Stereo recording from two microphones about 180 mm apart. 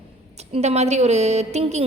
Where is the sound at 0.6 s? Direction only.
40° right (ahead or behind).